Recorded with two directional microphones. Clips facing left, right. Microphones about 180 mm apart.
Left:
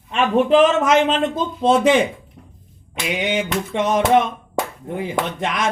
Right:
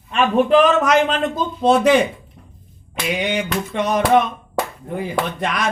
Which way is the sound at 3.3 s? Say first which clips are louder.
Left 1 dB; 25° left (ahead or behind).